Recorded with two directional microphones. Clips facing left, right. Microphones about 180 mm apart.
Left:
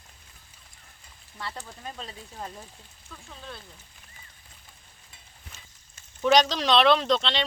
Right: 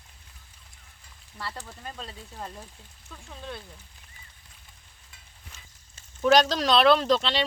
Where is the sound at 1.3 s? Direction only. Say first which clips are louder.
Even; centre (ahead or behind).